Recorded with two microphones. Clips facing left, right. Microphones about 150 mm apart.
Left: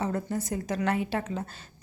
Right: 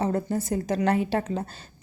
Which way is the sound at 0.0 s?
35° right (ahead or behind).